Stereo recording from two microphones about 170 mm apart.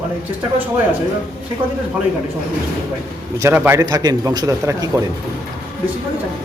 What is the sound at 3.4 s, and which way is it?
Speech, 15° right (ahead or behind).